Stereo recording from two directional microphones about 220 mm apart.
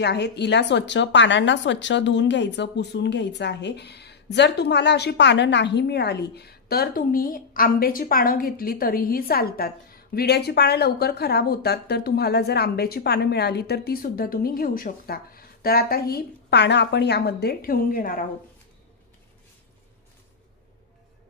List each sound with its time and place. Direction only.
0.0 s a woman's voice: 50° left (ahead or behind)